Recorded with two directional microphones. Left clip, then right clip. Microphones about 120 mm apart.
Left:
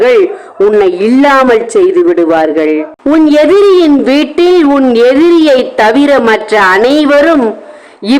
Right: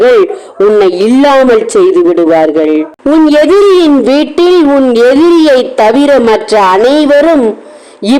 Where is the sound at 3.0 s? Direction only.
35° right (ahead or behind).